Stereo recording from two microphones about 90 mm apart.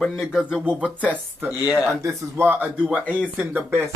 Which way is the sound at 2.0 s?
25° right (ahead or behind).